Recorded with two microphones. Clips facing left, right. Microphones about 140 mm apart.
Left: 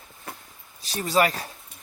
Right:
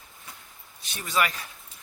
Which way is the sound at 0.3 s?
60° left (ahead or behind).